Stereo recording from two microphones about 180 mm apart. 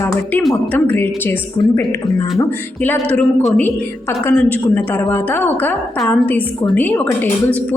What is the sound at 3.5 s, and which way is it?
A woman's voice, 10° left (ahead or behind).